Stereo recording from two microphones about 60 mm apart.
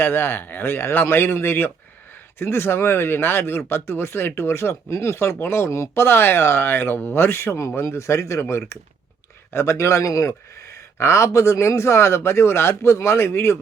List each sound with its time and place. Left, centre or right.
0.0 s a man's voice: left
10.8 s speech: left